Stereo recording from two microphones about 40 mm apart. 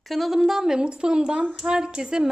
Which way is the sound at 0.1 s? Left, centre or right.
Centre.